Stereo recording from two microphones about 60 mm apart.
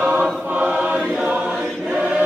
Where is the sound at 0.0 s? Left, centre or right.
Right.